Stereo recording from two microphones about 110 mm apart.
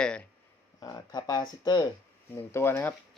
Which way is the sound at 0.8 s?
35° left (ahead or behind).